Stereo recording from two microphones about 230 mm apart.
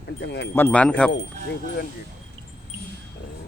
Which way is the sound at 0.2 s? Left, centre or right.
Left.